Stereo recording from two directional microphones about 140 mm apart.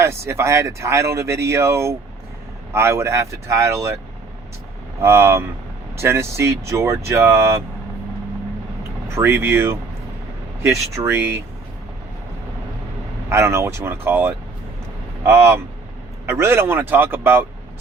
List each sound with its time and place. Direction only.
0.0 s speech: 20° right (ahead or behind)
4.9 s speech: 20° right (ahead or behind)
9.1 s speech: 15° right (ahead or behind)
13.3 s speech: 20° right (ahead or behind)